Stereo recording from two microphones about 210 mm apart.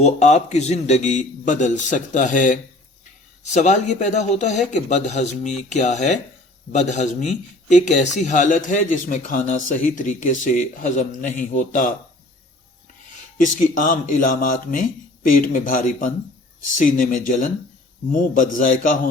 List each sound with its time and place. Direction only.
0.0 s a man's voice: 35° left (ahead or behind)
13.4 s a man's voice: 40° left (ahead or behind)